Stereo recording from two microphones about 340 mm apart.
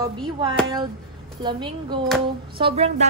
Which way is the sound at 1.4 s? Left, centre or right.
Centre.